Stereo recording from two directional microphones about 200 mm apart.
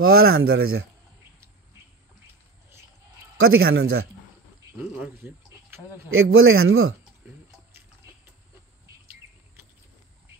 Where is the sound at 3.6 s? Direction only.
50° right (ahead or behind).